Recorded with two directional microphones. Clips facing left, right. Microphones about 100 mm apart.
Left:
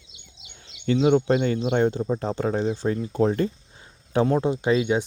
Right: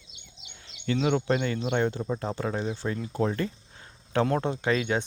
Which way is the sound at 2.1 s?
30° left (ahead or behind).